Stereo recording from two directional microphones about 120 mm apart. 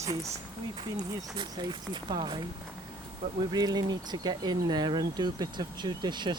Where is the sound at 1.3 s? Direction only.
40° right (ahead or behind).